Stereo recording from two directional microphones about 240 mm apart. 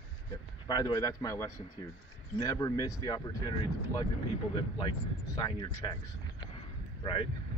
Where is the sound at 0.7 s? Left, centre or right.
Centre.